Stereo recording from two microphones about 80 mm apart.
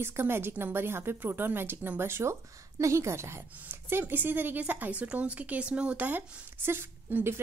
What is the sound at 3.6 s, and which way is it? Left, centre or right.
Speech, right.